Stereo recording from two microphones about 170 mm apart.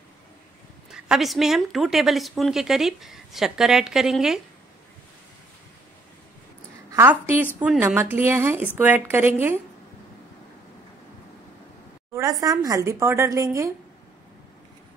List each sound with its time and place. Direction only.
0.9 s speech: 5° right (ahead or behind)
6.9 s a woman's voice: 15° right (ahead or behind)
12.1 s a woman's voice: 20° right (ahead or behind)